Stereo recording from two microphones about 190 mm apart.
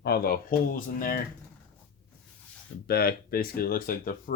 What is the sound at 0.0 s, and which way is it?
Speech, 55° left (ahead or behind).